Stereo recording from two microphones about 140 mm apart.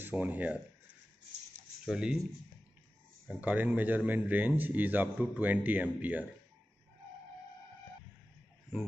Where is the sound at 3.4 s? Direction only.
10° right (ahead or behind).